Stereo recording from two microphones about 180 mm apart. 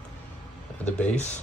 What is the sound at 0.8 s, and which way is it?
Speech, 10° left (ahead or behind).